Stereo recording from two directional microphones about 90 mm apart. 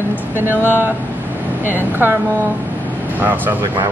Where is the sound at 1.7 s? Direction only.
20° right (ahead or behind).